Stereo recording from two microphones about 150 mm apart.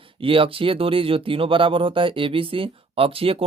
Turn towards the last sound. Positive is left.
turn(degrees=-40)  # may be behind; listen again after turning